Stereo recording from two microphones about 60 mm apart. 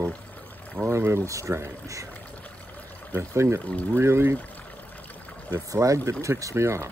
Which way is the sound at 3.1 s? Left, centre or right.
Right.